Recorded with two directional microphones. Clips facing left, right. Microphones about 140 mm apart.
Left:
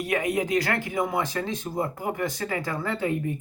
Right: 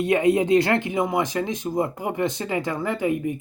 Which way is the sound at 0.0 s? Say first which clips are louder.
Right 7 dB; 25° right (ahead or behind).